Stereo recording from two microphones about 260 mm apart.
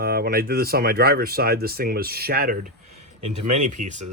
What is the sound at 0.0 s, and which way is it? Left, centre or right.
Speech, right.